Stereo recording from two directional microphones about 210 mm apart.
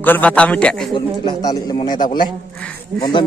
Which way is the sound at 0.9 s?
20° left (ahead or behind).